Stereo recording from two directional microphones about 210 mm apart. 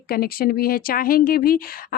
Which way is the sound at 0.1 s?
45° left (ahead or behind).